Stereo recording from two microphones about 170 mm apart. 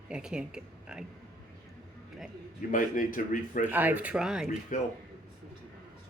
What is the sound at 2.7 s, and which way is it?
Speech, 55° left (ahead or behind).